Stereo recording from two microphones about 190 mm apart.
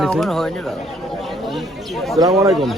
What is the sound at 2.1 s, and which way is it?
Speech, 20° right (ahead or behind).